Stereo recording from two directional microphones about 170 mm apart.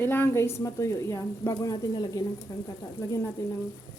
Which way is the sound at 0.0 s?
10° left (ahead or behind).